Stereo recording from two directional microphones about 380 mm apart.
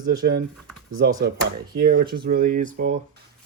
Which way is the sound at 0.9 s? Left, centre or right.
Right.